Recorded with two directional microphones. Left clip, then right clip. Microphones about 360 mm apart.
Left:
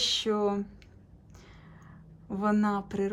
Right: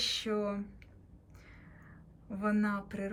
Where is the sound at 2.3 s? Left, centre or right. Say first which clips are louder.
Left 5 dB; centre.